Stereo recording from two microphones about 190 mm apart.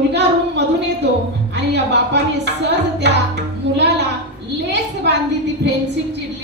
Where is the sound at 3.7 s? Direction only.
65° right (ahead or behind).